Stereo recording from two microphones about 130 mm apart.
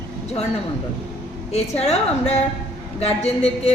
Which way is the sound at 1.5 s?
55° left (ahead or behind).